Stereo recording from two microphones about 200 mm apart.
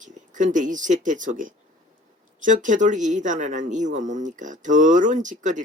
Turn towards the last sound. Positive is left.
turn(degrees=-40)  # may be behind; listen again after turning